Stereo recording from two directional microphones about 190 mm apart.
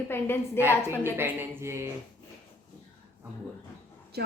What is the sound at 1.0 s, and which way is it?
Speech, 10° right (ahead or behind).